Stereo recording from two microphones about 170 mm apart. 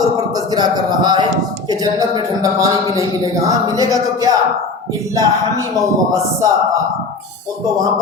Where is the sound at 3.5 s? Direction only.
20° right (ahead or behind).